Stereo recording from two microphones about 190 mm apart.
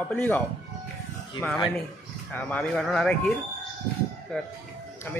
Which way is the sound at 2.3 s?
5° left (ahead or behind).